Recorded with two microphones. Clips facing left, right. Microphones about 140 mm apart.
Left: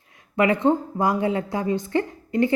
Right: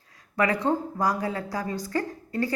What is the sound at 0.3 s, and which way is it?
A woman's voice, 25° left (ahead or behind).